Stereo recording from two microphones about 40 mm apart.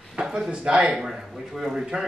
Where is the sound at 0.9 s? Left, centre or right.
Centre.